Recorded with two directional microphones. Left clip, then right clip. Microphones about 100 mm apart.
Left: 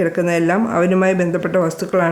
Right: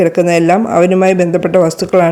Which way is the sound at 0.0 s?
50° right (ahead or behind).